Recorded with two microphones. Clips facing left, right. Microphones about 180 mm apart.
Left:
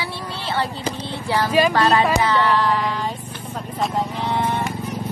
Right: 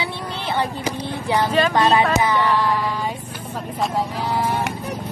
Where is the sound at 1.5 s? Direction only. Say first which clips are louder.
Left 5 dB; 10° left (ahead or behind).